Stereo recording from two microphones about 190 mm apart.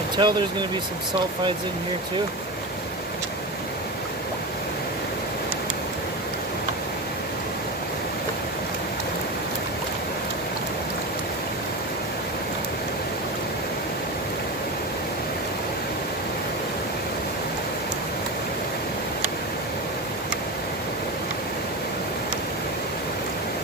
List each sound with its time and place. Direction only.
0.2 s speech: 25° right (ahead or behind)